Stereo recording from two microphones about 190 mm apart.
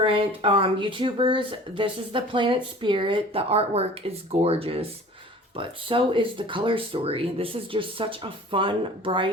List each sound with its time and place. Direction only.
0.0 s speech: 30° right (ahead or behind)